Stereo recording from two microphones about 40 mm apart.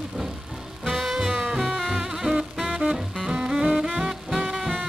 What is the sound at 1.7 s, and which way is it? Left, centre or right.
Music, centre.